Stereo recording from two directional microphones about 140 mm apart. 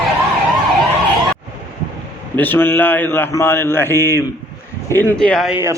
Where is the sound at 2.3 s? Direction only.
15° left (ahead or behind).